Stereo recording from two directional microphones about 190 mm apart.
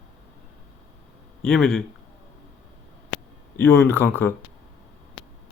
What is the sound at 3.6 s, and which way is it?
Speech, 10° left (ahead or behind).